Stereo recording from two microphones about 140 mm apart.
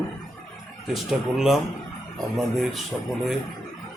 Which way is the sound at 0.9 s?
Centre (ahead or behind).